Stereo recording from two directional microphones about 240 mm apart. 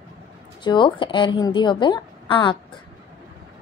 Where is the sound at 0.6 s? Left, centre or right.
Centre.